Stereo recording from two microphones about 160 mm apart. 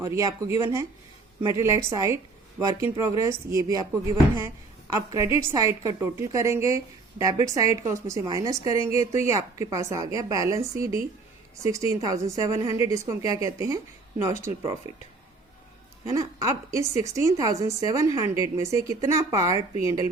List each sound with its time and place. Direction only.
0.0 s a woman's voice: 20° right (ahead or behind)
16.0 s a woman's voice: 20° right (ahead or behind)